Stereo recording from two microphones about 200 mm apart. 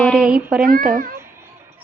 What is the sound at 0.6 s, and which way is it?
Speech, 45° right (ahead or behind).